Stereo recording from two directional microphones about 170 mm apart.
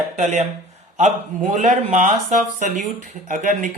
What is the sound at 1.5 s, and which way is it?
Speech, 45° right (ahead or behind).